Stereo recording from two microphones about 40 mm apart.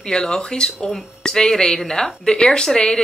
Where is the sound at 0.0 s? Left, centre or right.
Centre.